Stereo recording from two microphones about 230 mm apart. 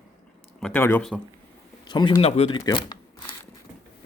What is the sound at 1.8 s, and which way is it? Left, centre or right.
Speech, centre.